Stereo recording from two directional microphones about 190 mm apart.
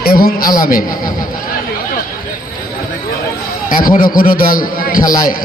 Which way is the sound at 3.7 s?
50° left (ahead or behind).